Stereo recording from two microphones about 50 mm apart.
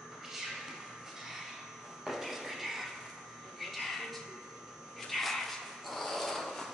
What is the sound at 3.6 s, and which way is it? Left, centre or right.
Music, centre.